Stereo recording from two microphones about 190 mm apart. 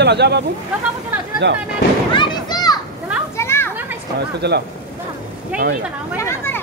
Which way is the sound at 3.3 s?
15° left (ahead or behind).